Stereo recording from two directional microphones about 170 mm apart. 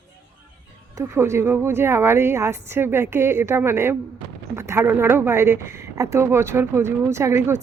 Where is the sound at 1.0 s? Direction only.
15° right (ahead or behind).